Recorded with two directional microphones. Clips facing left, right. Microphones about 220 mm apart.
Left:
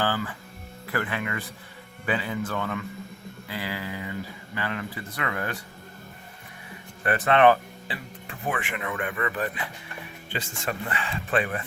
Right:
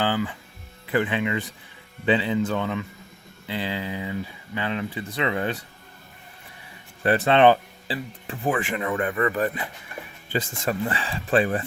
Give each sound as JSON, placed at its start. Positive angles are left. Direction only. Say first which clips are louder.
{"t": 0.0, "sound": "music", "louder": "right 3 dB", "side_deg": -15}
{"t": 0.9, "sound": "speech", "louder": "right 6 dB", "side_deg": -20}
{"t": 7.0, "sound": "speech", "louder": "right 2 dB", "side_deg": -30}